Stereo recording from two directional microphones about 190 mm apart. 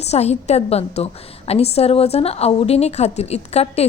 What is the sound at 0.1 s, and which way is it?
A woman's voice, 35° left (ahead or behind).